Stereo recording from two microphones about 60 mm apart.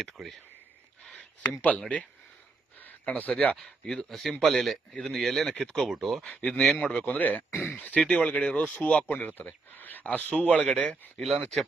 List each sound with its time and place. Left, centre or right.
0.0 s speech: centre
1.4 s speech: left
5.9 s speech: centre
6.3 s speech: centre
11.2 s speech: centre